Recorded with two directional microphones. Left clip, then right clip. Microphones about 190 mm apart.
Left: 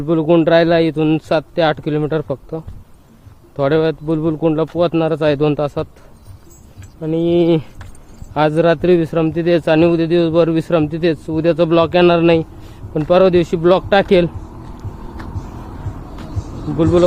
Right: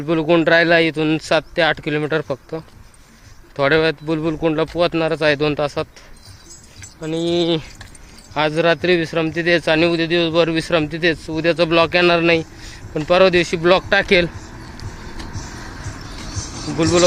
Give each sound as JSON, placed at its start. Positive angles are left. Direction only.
{"t": 0.0, "sound": "speech", "side_deg": 15}
{"t": 3.6, "sound": "speech", "side_deg": 10}
{"t": 7.3, "sound": "speech", "side_deg": 30}
{"t": 16.7, "sound": "speech", "side_deg": 15}